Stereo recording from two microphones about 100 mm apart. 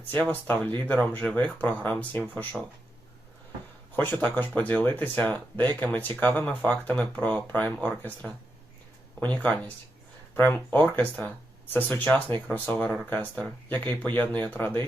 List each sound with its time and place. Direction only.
0.1 s speech: 20° left (ahead or behind)
3.9 s speech: 20° left (ahead or behind)